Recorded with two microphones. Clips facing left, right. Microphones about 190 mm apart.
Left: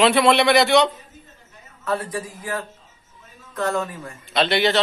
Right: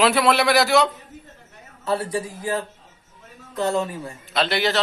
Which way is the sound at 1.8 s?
30° right (ahead or behind).